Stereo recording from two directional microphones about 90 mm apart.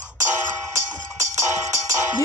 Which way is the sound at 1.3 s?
35° right (ahead or behind).